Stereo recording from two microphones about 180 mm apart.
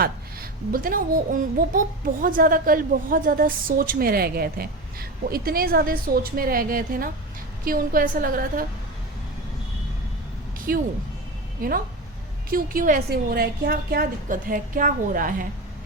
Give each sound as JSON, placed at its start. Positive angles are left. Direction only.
{"t": 0.7, "sound": "a woman's voice", "side_deg": -50}
{"t": 10.7, "sound": "a woman's voice", "side_deg": -55}